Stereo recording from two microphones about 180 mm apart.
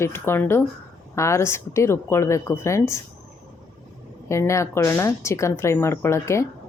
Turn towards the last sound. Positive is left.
turn(degrees=15)  # may be behind; listen again after turning